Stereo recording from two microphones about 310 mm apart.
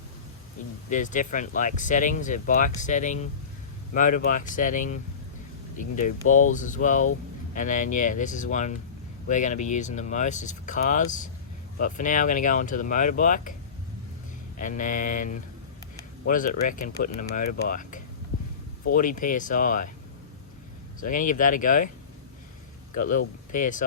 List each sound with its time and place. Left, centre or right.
0.9 s speech: left
14.6 s speech: left
21.0 s speech: left
23.0 s speech: left